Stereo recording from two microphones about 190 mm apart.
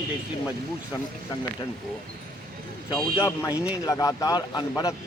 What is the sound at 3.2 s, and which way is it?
Speech, 15° left (ahead or behind).